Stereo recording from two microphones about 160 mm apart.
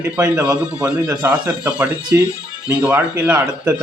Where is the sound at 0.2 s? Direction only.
15° right (ahead or behind).